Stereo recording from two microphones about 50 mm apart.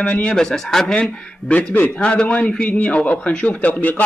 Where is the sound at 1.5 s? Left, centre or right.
Left.